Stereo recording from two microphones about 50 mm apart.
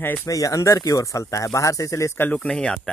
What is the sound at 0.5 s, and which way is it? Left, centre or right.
Speech, left.